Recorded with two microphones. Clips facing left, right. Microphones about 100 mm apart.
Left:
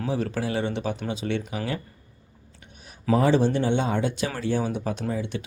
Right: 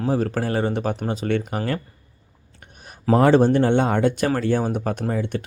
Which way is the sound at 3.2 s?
60° right (ahead or behind).